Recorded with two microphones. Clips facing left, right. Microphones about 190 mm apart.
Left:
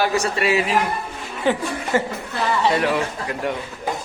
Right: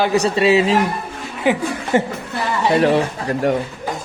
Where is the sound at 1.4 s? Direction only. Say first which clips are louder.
Right 3 dB; 10° right (ahead or behind).